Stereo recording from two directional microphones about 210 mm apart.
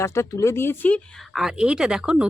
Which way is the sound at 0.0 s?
15° left (ahead or behind).